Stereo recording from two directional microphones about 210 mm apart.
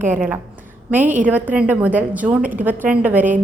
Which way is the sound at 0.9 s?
10° right (ahead or behind).